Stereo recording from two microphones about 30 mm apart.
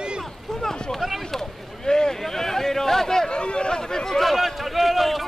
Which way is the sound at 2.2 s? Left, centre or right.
Centre.